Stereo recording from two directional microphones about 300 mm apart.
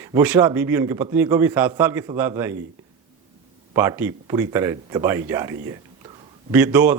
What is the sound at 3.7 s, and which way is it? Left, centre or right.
Speech, centre.